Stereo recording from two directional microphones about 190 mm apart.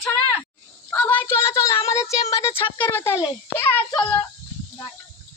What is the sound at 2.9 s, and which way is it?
Speech, 10° left (ahead or behind).